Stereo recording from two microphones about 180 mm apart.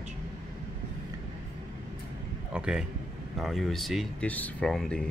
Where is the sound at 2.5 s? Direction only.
5° right (ahead or behind).